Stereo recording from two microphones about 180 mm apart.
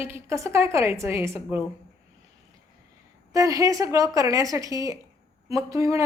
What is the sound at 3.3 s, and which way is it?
A woman's voice, 20° right (ahead or behind).